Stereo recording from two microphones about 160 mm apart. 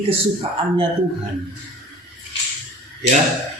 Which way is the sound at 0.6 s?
35° right (ahead or behind).